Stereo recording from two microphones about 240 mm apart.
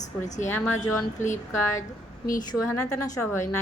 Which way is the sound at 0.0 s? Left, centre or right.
Left.